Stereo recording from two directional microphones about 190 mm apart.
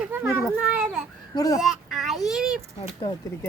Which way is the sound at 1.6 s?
Centre (ahead or behind).